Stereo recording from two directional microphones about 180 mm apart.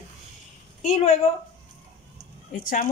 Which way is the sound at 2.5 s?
50° left (ahead or behind).